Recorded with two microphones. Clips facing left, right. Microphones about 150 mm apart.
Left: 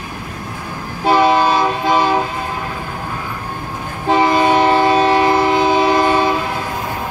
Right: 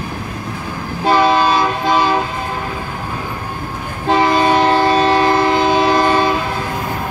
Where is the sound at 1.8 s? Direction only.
5° left (ahead or behind).